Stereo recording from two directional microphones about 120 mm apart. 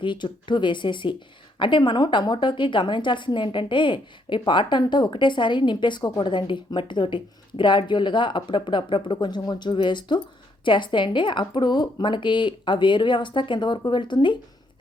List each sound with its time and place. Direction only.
0.0 s speech: 40° left (ahead or behind)